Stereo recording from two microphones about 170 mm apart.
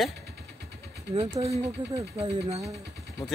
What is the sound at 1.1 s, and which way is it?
Speech, 35° right (ahead or behind).